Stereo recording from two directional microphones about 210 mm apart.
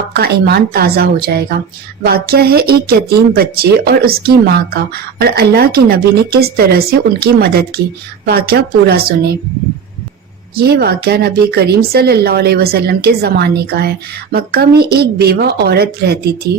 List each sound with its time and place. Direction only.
0.1 s a woman's voice: 50° right (ahead or behind)
10.5 s a woman's voice: 45° right (ahead or behind)